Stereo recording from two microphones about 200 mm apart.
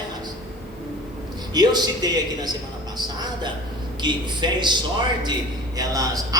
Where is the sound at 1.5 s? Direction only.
20° right (ahead or behind).